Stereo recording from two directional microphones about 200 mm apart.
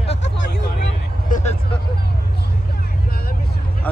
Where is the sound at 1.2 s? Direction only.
40° left (ahead or behind).